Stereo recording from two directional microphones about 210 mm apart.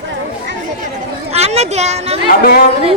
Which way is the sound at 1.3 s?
30° right (ahead or behind).